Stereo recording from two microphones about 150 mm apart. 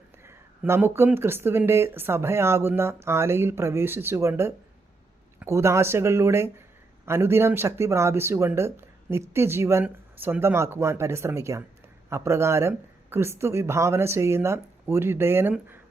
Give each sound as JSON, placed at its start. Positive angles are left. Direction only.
{"t": 0.3, "sound": "speech", "side_deg": -15}